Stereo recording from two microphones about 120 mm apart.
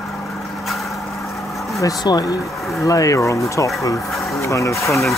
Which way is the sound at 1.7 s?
30° left (ahead or behind).